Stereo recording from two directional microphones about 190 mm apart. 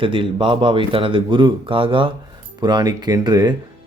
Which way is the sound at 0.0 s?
25° right (ahead or behind).